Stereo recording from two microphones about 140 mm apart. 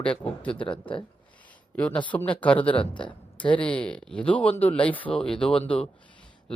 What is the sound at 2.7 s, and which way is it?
Speech, 35° left (ahead or behind).